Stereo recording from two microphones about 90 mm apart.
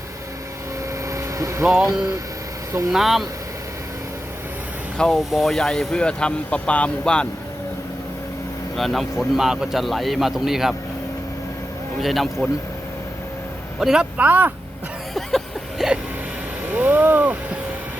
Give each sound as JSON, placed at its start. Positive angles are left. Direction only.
{"t": 1.1, "sound": "a sound", "side_deg": -35}
{"t": 1.6, "sound": "speech", "side_deg": -5}
{"t": 1.9, "sound": "speech", "side_deg": -35}
{"t": 2.9, "sound": "speech", "side_deg": -5}
{"t": 4.9, "sound": "speech", "side_deg": 5}
{"t": 8.7, "sound": "speech", "side_deg": 0}
{"t": 12.0, "sound": "speech", "side_deg": 0}
{"t": 13.7, "sound": "speech", "side_deg": -5}
{"t": 15.8, "sound": "hiccup", "side_deg": -5}
{"t": 16.7, "sound": "vehicle", "side_deg": -20}